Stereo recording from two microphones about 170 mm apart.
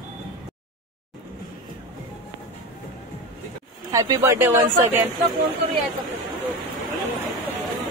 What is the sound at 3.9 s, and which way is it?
Speech, 20° right (ahead or behind).